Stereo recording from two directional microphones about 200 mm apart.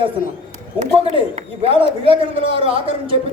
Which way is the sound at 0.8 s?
30° right (ahead or behind).